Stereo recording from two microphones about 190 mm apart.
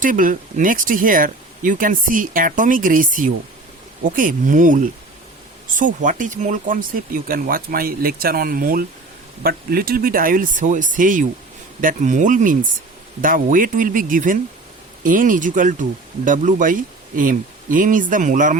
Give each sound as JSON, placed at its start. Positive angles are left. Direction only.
{"t": 0.0, "sound": "speech", "side_deg": -45}